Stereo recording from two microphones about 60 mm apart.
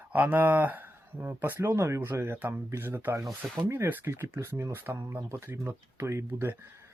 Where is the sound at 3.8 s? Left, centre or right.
Right.